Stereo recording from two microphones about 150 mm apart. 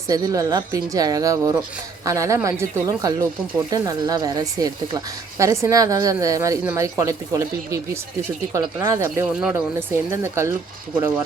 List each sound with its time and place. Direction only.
0.1 s speech: 25° right (ahead or behind)